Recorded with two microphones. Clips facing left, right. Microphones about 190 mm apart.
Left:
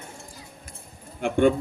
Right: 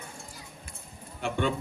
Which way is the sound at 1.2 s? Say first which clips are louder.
Left 9 dB; 50° left (ahead or behind).